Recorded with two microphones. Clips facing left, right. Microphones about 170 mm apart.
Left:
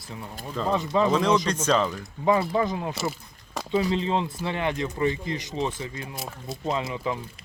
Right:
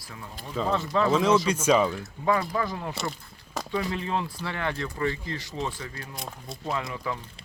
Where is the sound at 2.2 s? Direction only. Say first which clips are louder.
Left 4 dB; 25° left (ahead or behind).